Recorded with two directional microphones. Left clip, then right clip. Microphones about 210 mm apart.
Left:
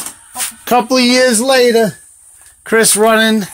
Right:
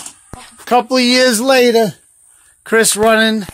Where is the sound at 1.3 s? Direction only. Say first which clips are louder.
Left 1 dB; 35° right (ahead or behind).